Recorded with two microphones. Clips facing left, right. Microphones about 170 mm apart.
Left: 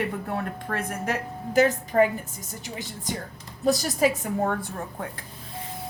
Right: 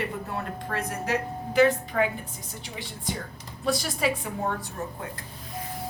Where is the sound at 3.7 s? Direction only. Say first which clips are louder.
Left 4 dB; 40° left (ahead or behind).